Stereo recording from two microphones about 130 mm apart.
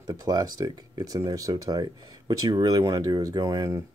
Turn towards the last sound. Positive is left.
turn(degrees=-25)  # may be behind; listen again after turning